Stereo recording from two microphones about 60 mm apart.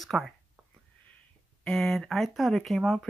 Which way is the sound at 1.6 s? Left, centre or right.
Centre.